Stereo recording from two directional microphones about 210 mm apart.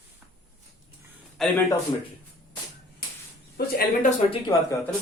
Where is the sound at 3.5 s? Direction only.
45° left (ahead or behind).